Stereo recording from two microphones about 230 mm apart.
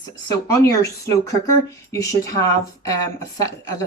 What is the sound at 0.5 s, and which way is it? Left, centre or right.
A woman's voice, centre.